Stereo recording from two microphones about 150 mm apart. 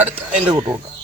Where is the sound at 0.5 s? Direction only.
30° right (ahead or behind).